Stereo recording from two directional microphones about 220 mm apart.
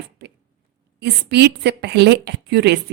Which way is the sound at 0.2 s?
50° right (ahead or behind).